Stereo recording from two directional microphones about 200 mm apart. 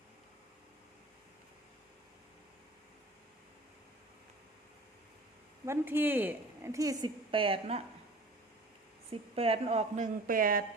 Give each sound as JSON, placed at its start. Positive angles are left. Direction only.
{"t": 5.6, "sound": "a woman's voice", "side_deg": -10}
{"t": 9.3, "sound": "speech", "side_deg": -30}